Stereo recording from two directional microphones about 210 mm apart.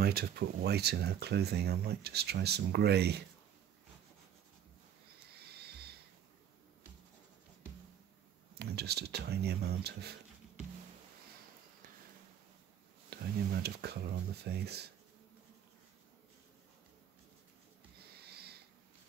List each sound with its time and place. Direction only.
0.0 s speech: 50° right (ahead or behind)
5.3 s music: 50° right (ahead or behind)
8.5 s speech: 50° right (ahead or behind)
13.1 s speech: 50° right (ahead or behind)
18.2 s a sound: 50° right (ahead or behind)